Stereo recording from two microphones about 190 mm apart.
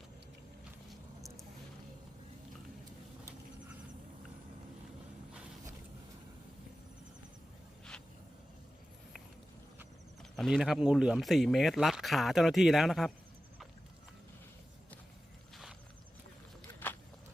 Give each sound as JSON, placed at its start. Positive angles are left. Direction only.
{"t": 10.3, "sound": "speech", "side_deg": 0}